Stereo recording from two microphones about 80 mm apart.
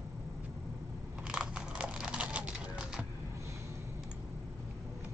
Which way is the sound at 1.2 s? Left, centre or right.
Centre.